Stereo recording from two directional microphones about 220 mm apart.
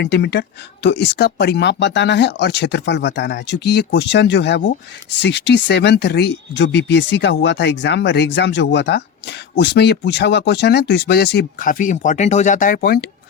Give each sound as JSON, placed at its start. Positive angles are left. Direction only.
{"t": 0.0, "sound": "speech", "side_deg": 50}